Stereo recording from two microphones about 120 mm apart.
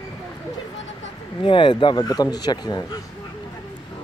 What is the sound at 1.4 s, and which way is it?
Speech, 45° left (ahead or behind).